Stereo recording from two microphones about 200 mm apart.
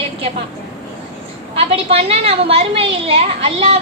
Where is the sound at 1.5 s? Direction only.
30° right (ahead or behind).